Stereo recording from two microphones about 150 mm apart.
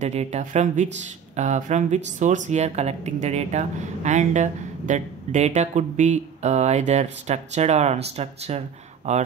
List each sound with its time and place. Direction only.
0.0 s speech: 45° right (ahead or behind)